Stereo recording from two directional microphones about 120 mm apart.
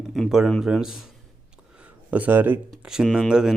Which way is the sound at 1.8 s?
15° right (ahead or behind).